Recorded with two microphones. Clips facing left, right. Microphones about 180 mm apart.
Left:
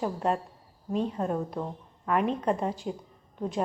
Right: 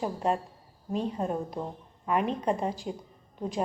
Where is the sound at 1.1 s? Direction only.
10° right (ahead or behind).